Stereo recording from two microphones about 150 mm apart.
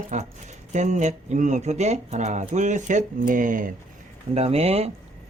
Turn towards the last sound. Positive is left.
turn(degrees=-45)  # may be behind; listen again after turning